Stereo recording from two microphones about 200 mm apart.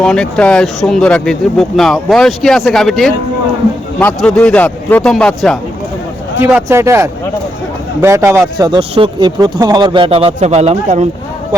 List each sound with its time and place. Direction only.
0.0 s a man's voice: 5° left (ahead or behind)
6.7 s a man's voice: 15° right (ahead or behind); by 11.0 s 35° right (ahead or behind)